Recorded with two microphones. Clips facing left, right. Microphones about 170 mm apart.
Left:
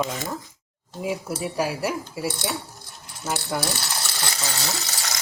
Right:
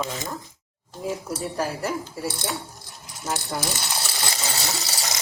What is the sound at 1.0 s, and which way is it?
Speech, 10° left (ahead or behind).